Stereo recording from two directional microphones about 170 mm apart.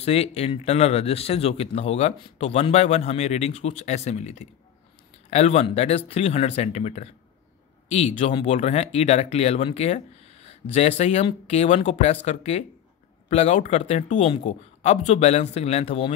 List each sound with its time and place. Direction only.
0.0 s speech: 35° left (ahead or behind)